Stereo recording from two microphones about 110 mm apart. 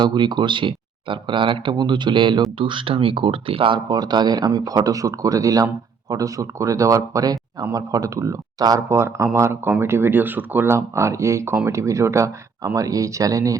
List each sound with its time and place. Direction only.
0.0 s speech: 45° right (ahead or behind)
3.8 s speech: 40° right (ahead or behind)
8.9 s speech: 25° right (ahead or behind)